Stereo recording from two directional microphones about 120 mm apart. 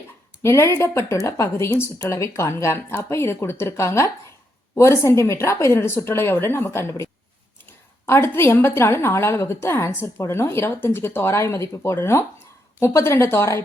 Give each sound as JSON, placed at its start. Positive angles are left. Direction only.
{"t": 0.4, "sound": "a woman's voice", "side_deg": 25}